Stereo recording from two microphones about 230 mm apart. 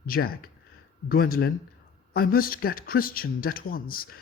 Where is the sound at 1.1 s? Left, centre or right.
Left.